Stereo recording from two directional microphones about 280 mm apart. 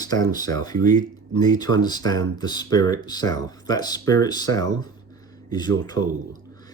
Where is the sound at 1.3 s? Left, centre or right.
Centre.